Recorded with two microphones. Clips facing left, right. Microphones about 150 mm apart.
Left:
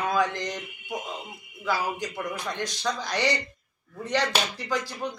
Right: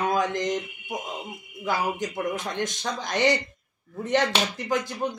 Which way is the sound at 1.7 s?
45° right (ahead or behind).